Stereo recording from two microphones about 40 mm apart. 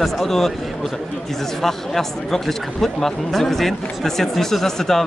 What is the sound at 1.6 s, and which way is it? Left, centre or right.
Speech, centre.